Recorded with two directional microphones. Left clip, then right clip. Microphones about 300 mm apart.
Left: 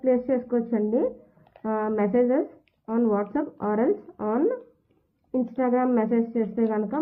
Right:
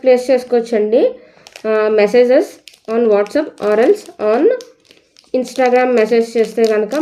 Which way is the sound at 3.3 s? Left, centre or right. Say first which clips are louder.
Right 12 dB; centre.